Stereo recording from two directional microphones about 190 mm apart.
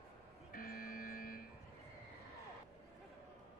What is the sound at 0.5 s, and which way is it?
Buzzer, 50° left (ahead or behind).